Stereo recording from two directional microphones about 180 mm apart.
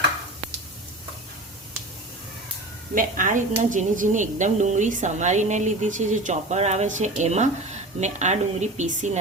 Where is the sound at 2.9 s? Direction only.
50° right (ahead or behind).